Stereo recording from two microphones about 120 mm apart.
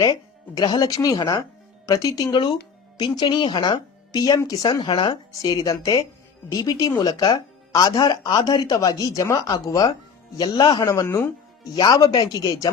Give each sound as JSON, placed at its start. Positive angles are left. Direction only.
{"t": 0.0, "sound": "speech", "side_deg": 30}